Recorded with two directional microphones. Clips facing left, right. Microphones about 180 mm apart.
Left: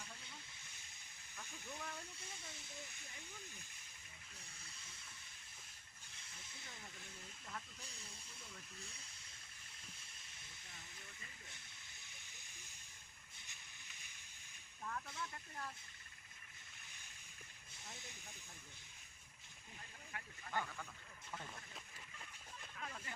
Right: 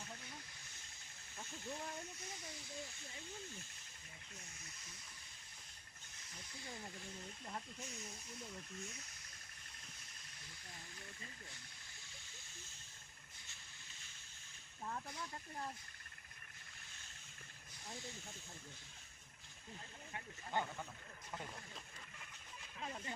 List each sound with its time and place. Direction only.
1.4 s speech: 20° right (ahead or behind)
6.2 s speech: 25° left (ahead or behind)
8.8 s speech: 30° left (ahead or behind)
14.8 s speech: 25° right (ahead or behind)
20.1 s speech: 20° right (ahead or behind)
22.8 s speech: 25° right (ahead or behind)